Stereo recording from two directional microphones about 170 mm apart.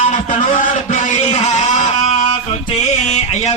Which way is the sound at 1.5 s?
40° left (ahead or behind).